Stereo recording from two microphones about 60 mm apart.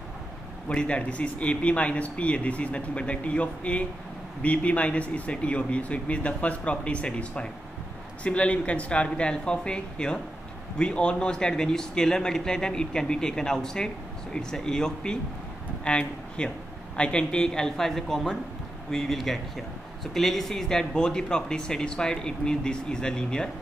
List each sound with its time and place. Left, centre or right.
0.7 s a man's voice: centre